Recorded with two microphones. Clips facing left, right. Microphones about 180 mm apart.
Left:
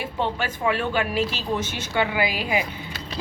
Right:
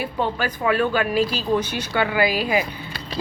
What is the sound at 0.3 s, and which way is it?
Speech, 25° left (ahead or behind).